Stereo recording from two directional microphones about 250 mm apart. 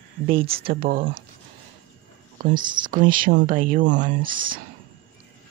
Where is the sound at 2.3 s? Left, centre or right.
Right.